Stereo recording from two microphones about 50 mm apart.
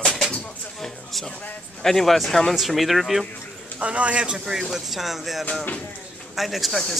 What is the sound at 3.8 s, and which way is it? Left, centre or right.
Speech, right.